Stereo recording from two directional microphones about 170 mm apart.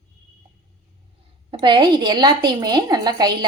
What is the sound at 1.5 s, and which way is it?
A woman's voice, 30° right (ahead or behind).